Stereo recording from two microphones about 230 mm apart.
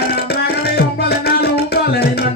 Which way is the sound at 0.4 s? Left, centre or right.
Left.